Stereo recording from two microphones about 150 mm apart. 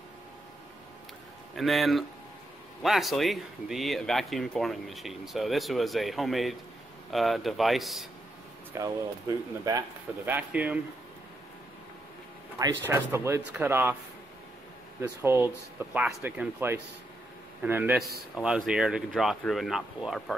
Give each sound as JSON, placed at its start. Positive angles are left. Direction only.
{"t": 1.5, "sound": "speech", "side_deg": 0}
{"t": 8.7, "sound": "speech", "side_deg": -20}
{"t": 12.5, "sound": "speech", "side_deg": -20}
{"t": 15.0, "sound": "a man's voice", "side_deg": -15}